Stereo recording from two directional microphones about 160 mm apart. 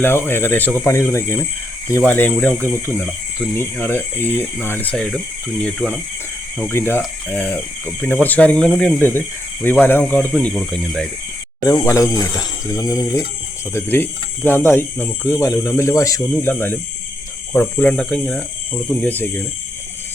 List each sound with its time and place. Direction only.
0.0 s speech: 15° left (ahead or behind)
6.6 s speech: 15° left (ahead or behind)
11.6 s speech: 20° left (ahead or behind)